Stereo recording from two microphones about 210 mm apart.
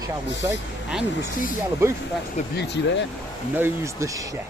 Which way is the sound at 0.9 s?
5° right (ahead or behind).